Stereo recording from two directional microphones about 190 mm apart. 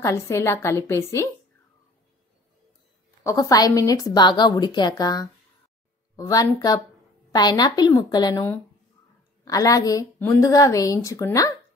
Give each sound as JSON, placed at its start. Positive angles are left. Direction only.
{"t": 0.0, "sound": "a woman's voice", "side_deg": 15}
{"t": 3.3, "sound": "a woman's voice", "side_deg": 20}